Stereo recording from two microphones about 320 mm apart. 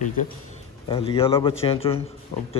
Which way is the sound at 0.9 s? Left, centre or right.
Centre.